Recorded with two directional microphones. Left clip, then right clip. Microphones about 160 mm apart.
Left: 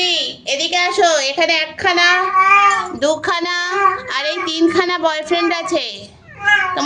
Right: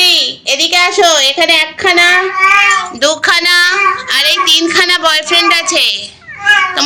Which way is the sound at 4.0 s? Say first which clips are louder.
Right 9 dB; 40° left (ahead or behind).